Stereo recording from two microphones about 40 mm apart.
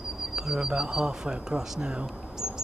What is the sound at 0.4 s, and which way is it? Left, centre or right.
Speech, centre.